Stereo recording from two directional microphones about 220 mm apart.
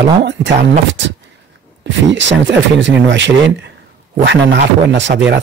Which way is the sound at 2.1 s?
55° right (ahead or behind).